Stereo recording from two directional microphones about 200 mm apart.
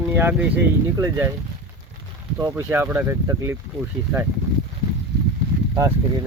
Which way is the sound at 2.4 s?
15° right (ahead or behind).